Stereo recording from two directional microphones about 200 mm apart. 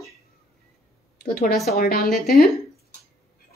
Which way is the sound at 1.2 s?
50° left (ahead or behind).